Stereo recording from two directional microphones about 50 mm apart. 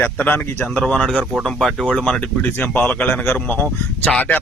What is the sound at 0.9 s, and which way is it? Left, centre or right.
Speech, centre.